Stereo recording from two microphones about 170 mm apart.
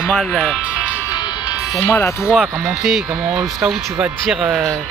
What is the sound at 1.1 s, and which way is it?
Music, 25° left (ahead or behind).